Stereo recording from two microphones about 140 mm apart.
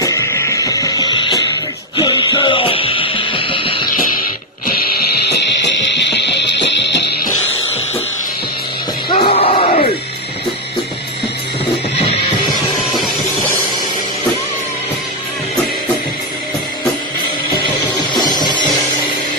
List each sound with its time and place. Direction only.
0.0 s music: 25° left (ahead or behind)
9.1 s music: 40° left (ahead or behind)
18.1 s music: 30° left (ahead or behind)